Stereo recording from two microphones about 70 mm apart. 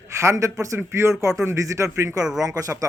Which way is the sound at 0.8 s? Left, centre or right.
Right.